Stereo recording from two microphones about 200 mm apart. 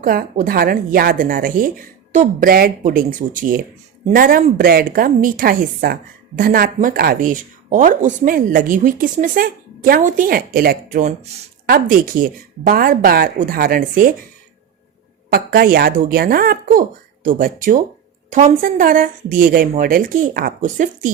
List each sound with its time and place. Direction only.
0.0 s a woman's voice: 45° right (ahead or behind)
15.3 s a woman's voice: 45° right (ahead or behind)